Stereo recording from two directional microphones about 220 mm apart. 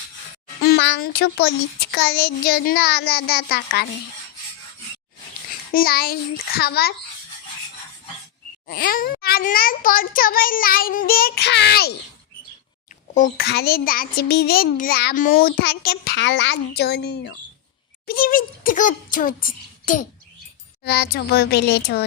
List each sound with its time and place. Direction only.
0.6 s a child's voice: 50° left (ahead or behind)
5.7 s a child's voice: 45° left (ahead or behind)
8.6 s a child's voice: 40° left (ahead or behind)
13.1 s a child's voice: 40° left (ahead or behind)